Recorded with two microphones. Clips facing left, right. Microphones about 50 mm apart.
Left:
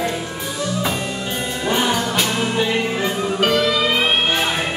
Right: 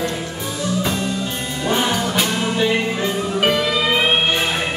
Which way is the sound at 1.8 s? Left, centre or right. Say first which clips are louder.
Even; centre.